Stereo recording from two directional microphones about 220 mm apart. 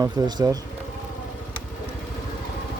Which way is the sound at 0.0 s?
20° right (ahead or behind).